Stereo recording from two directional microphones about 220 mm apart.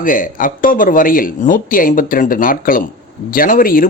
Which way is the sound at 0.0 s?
40° left (ahead or behind).